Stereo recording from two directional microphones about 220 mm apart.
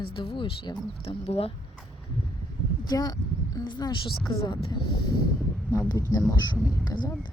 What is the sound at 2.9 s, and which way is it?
Speech, 15° left (ahead or behind).